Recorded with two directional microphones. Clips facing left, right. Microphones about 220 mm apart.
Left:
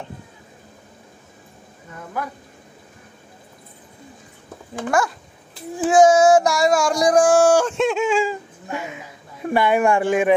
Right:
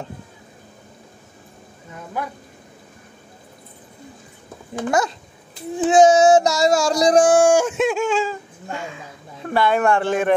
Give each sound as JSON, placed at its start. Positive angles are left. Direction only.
{"t": 4.7, "sound": "speech", "side_deg": -20}
{"t": 5.9, "sound": "child singing", "side_deg": -20}